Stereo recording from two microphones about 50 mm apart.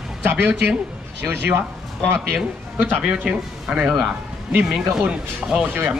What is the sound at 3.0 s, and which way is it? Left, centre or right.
Speech, right.